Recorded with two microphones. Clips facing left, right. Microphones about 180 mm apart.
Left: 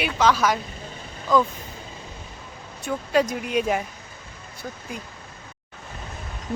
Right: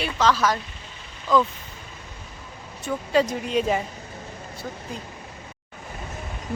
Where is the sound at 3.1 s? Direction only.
5° left (ahead or behind).